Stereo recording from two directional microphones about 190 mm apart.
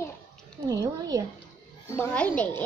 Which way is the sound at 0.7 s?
20° right (ahead or behind).